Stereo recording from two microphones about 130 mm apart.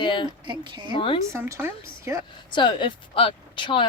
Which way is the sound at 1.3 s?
20° right (ahead or behind).